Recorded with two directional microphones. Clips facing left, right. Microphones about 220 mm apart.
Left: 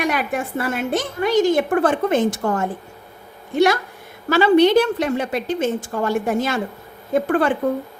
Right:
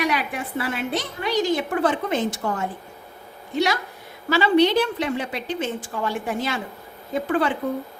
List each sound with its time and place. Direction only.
0.0 s a woman's voice: 50° left (ahead or behind)